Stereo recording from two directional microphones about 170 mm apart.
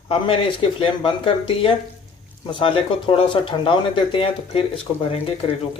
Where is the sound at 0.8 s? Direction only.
30° left (ahead or behind).